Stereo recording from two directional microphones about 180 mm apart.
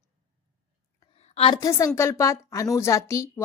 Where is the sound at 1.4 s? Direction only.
25° left (ahead or behind).